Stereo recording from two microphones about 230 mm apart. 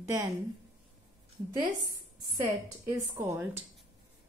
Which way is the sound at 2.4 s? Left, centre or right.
Centre.